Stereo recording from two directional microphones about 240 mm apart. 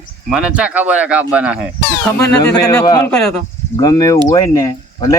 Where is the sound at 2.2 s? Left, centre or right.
Centre.